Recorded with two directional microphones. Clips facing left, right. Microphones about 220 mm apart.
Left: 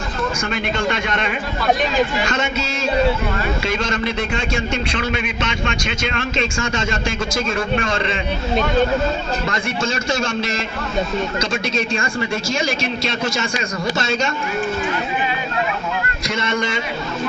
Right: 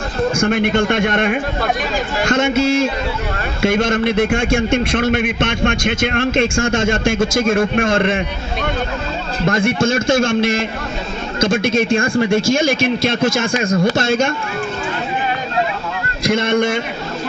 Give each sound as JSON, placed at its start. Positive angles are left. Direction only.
{"t": 0.3, "sound": "a man's voice", "side_deg": -50}
{"t": 9.5, "sound": "a man's voice", "side_deg": -50}
{"t": 16.2, "sound": "a man's voice", "side_deg": -55}